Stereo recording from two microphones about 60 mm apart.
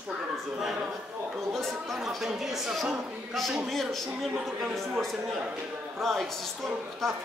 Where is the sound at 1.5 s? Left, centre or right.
Centre.